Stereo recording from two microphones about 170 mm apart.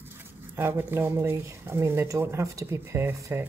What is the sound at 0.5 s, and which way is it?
Speech, 15° right (ahead or behind).